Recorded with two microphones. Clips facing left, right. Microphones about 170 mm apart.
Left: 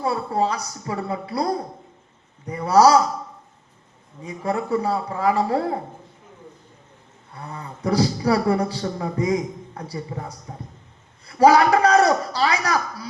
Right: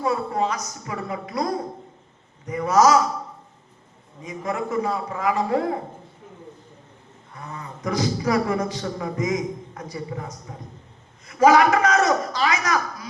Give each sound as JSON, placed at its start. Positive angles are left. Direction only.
{"t": 0.0, "sound": "a man's voice", "side_deg": 35}
{"t": 2.5, "sound": "a man's voice", "side_deg": 35}
{"t": 4.2, "sound": "a man's voice", "side_deg": 35}
{"t": 7.3, "sound": "a man's voice", "side_deg": 35}